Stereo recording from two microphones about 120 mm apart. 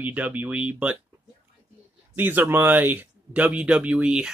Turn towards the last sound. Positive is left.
turn(degrees=-5)  # may be behind; listen again after turning